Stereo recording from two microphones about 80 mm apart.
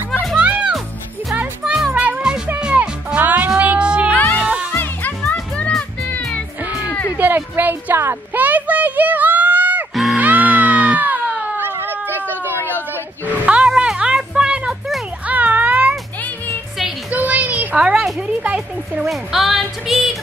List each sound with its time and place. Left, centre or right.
0.4 s music: centre
2.6 s cat: centre
4.1 s cat: left
4.4 s music: centre
4.6 s music: left
6.6 s a sound: right
10.1 s music: centre
11.0 s a sound: centre
13.5 s music: centre
15.2 s a sound: right
17.1 s a sound: centre
19.0 s music: centre